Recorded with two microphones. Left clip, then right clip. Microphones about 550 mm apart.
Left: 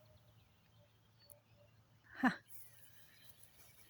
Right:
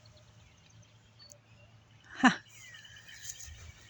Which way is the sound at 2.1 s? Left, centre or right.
Left.